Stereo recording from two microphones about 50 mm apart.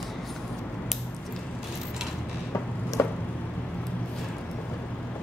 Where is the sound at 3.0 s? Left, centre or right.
Left.